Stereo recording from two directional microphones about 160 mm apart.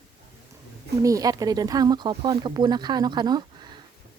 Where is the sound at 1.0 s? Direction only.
20° right (ahead or behind).